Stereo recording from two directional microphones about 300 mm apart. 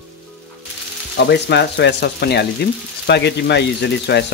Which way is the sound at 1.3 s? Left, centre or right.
Left.